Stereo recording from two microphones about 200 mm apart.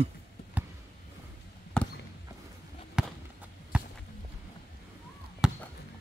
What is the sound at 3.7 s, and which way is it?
Walk, 5° right (ahead or behind).